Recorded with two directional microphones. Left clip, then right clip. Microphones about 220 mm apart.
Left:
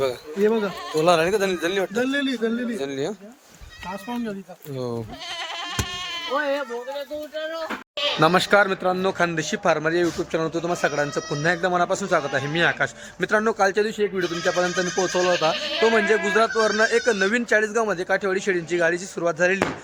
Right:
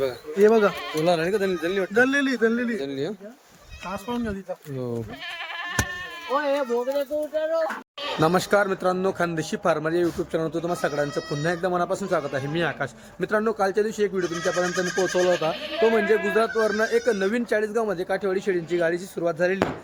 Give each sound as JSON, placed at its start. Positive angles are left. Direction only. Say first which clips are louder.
{"t": 0.4, "sound": "speech", "louder": "right 4 dB", "side_deg": -25}
{"t": 1.0, "sound": "a man's voice", "louder": "left 3 dB", "side_deg": 0}
{"t": 6.2, "sound": "speech", "louder": "right 1 dB", "side_deg": -50}
{"t": 7.3, "sound": "speech", "louder": "right 5 dB", "side_deg": -35}
{"t": 8.2, "sound": "a man's voice", "louder": "left 3 dB", "side_deg": 5}
{"t": 14.9, "sound": "speech", "louder": "even", "side_deg": 15}
{"t": 15.9, "sound": "a man's voice", "louder": "left 2 dB", "side_deg": 0}